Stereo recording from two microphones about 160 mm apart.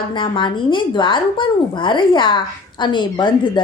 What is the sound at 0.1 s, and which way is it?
Speech, 30° left (ahead or behind).